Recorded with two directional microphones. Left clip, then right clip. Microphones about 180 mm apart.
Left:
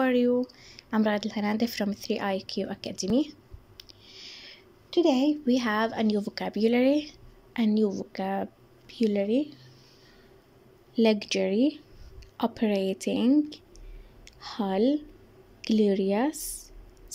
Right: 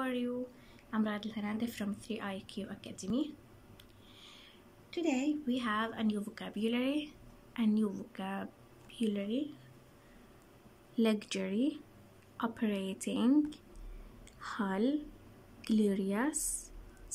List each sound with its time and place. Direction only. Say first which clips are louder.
0.0 s a woman's voice: left 13 dB; 40° left (ahead or behind)
11.0 s a woman's voice: left 10 dB; 15° left (ahead or behind)
14.4 s speech: left 8 dB; 15° left (ahead or behind)